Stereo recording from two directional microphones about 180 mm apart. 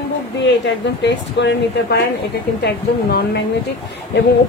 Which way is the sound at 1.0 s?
75° left (ahead or behind).